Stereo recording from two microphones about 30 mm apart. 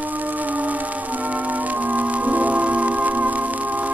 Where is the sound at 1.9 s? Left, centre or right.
Right.